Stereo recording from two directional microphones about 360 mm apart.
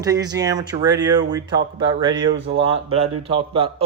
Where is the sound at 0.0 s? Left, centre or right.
Centre.